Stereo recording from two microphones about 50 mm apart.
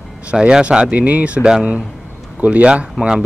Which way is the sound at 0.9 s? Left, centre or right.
Right.